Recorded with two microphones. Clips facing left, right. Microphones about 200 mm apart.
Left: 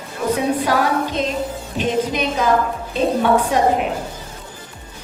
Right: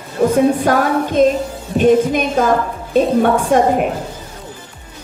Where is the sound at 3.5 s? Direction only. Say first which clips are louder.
Right 5 dB; 50° right (ahead or behind).